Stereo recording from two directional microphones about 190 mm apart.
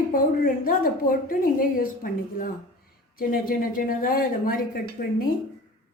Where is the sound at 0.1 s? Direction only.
50° left (ahead or behind).